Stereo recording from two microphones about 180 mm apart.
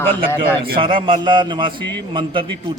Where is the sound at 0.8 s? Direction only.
30° right (ahead or behind).